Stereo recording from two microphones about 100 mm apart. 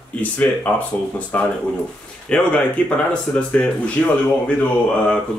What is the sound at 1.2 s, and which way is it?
Speech, 15° left (ahead or behind).